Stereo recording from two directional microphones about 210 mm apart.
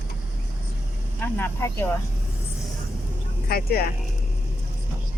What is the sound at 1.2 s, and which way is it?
Speech, 10° left (ahead or behind).